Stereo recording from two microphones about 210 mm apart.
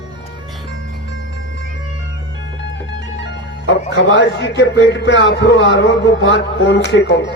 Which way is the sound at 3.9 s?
55° left (ahead or behind).